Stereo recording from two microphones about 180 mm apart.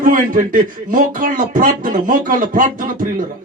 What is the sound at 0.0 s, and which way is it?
Speech, 50° right (ahead or behind).